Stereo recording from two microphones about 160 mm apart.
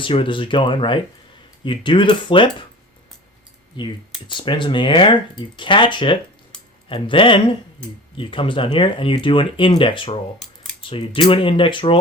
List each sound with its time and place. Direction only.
0.0 s speech: 35° left (ahead or behind)
3.8 s speech: 30° left (ahead or behind)
10.4 s a sound: centre (ahead or behind)
10.8 s speech: 35° left (ahead or behind)